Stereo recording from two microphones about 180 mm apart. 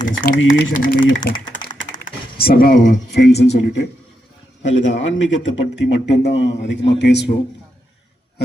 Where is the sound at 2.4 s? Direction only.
55° left (ahead or behind).